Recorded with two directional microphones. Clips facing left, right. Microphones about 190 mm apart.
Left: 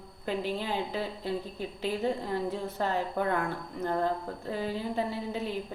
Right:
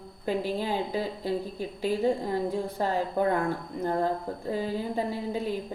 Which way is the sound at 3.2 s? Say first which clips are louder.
Right 5 dB; 35° right (ahead or behind).